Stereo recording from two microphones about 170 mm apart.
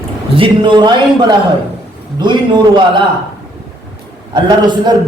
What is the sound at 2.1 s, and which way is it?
Speech, 25° right (ahead or behind).